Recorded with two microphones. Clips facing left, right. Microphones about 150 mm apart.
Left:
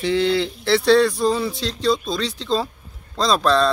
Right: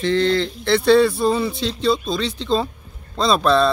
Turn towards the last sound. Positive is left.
turn(degrees=-5)  # may be behind; listen again after turning